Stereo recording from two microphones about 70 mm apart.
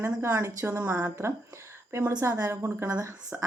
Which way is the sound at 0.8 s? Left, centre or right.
Right.